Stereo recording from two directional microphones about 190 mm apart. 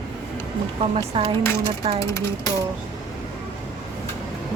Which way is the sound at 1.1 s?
30° right (ahead or behind).